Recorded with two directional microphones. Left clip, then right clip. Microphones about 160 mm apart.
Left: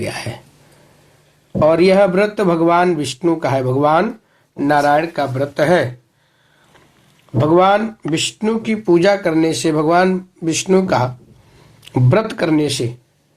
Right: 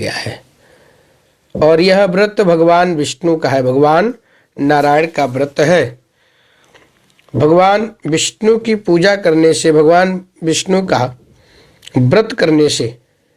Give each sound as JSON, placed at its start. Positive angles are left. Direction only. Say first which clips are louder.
{"t": 0.0, "sound": "speech", "louder": "right 4 dB", "side_deg": -35}
{"t": 1.5, "sound": "speech", "louder": "right 2 dB", "side_deg": -35}
{"t": 7.3, "sound": "speech", "louder": "right 3 dB", "side_deg": -35}